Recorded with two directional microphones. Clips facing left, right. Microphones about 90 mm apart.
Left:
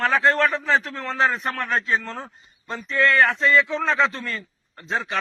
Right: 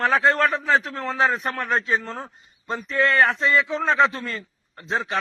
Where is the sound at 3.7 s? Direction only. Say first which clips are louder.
Right 2 dB; 10° right (ahead or behind).